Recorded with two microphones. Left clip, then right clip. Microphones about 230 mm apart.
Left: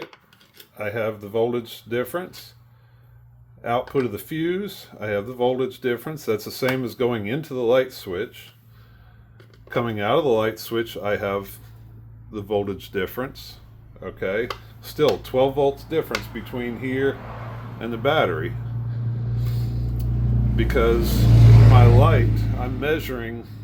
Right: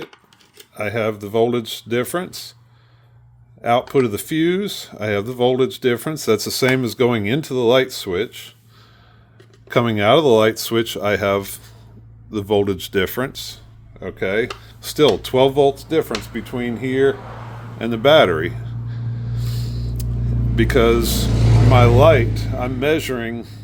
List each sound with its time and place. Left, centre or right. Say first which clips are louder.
0.8 s speech: right 5 dB; right
3.6 s speech: right 6 dB; right
9.6 s speech: right 8 dB; right
19.4 s vehicle: right 4 dB; right
20.6 s speech: right 5 dB; right